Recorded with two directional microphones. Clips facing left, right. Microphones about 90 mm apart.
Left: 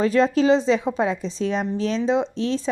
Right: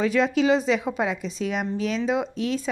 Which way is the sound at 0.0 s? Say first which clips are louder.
Left 3 dB; 35° left (ahead or behind).